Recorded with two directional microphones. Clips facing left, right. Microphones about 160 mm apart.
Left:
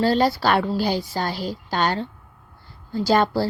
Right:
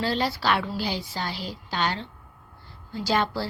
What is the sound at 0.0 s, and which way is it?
A woman's voice, 40° left (ahead or behind).